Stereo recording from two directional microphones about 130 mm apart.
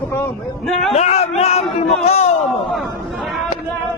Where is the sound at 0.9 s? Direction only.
55° left (ahead or behind).